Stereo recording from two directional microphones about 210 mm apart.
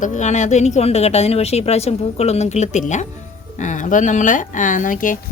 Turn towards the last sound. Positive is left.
turn(degrees=40)  # may be behind; listen again after turning